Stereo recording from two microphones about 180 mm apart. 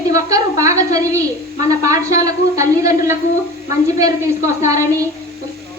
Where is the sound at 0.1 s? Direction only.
20° right (ahead or behind).